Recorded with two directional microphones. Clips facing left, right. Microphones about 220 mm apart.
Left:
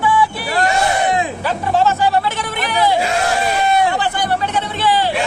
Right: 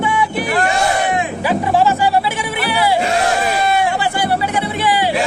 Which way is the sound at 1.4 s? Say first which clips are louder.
Right 4 dB; 15° right (ahead or behind).